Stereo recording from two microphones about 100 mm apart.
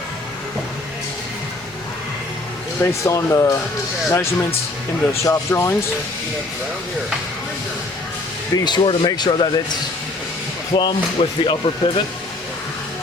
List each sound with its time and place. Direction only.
2.8 s speech: 30° left (ahead or behind)
8.5 s speech: 45° left (ahead or behind)
10.7 s speech: 50° left (ahead or behind)
11.2 s speech: 65° left (ahead or behind)